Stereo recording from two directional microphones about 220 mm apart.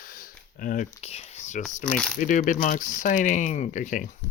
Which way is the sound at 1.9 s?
5° left (ahead or behind).